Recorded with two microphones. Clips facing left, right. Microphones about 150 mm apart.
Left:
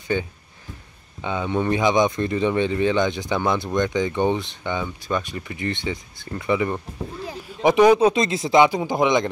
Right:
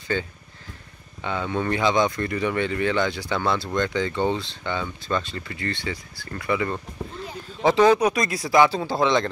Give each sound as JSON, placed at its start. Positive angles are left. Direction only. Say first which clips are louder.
{"t": 0.1, "sound": "speech", "louder": "left 2 dB", "side_deg": 15}